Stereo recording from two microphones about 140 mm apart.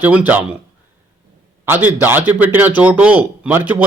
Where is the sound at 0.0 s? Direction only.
10° right (ahead or behind).